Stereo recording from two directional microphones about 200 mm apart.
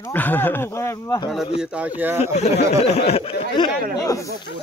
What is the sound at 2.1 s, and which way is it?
Speech, 35° left (ahead or behind).